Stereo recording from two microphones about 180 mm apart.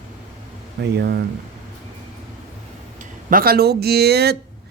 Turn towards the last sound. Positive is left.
turn(degrees=-65)  # may be behind; listen again after turning